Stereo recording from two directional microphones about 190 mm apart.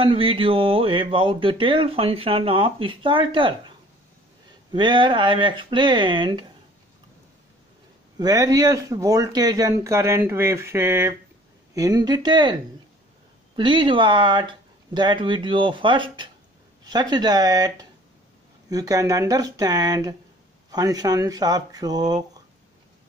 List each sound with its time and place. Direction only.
0.0 s speech: 30° right (ahead or behind)
4.7 s speech: 25° right (ahead or behind)
8.2 s speech: 20° right (ahead or behind)
13.6 s speech: 25° right (ahead or behind)